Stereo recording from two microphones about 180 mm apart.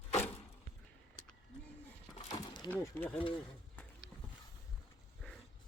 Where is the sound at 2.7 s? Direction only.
10° left (ahead or behind).